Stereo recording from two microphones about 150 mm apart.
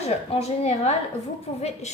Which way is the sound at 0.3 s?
45° left (ahead or behind).